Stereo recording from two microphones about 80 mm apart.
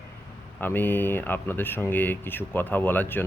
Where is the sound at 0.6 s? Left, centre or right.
Left.